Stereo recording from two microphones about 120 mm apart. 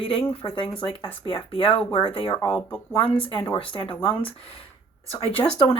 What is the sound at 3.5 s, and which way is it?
Speech, 45° left (ahead or behind).